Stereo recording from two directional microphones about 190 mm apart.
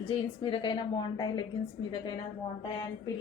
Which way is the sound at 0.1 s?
25° left (ahead or behind).